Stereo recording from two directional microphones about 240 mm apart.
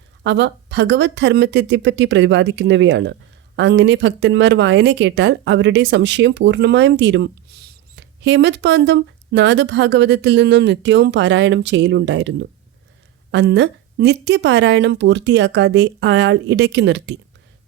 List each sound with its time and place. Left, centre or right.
0.2 s speech: right